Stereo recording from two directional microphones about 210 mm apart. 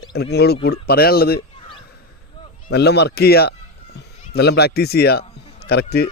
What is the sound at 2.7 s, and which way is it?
Speech, 50° left (ahead or behind).